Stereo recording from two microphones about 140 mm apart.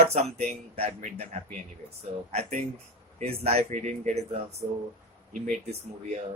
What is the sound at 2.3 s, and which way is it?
Speech, 55° right (ahead or behind).